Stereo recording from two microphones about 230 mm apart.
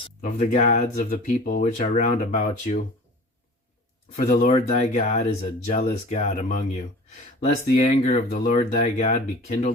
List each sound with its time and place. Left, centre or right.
0.0 s speech: left
4.2 s speech: left